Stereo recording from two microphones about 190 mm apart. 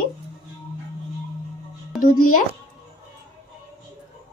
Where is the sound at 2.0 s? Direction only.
45° left (ahead or behind).